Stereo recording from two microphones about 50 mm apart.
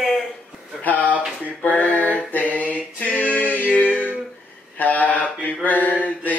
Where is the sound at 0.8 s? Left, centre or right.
Left.